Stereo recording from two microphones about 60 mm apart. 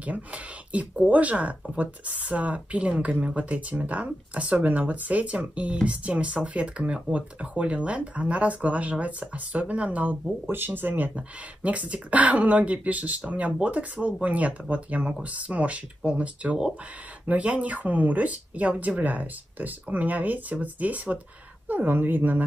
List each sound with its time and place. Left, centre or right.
0.0 s speech: right
10.4 s speech: right